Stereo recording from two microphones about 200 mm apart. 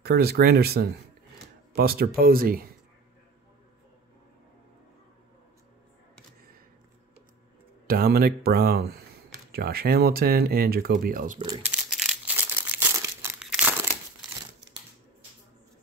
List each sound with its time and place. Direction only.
0.0 s speech: 50° right (ahead or behind)
7.8 s speech: 50° right (ahead or behind)
11.3 s speech: 20° right (ahead or behind)
11.7 s crumpling: 5° right (ahead or behind)